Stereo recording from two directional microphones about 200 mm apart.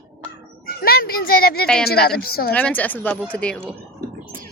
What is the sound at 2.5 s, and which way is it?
A woman's voice, 5° left (ahead or behind).